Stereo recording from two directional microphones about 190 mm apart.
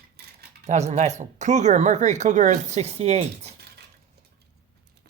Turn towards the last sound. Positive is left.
turn(degrees=-35)  # may be behind; listen again after turning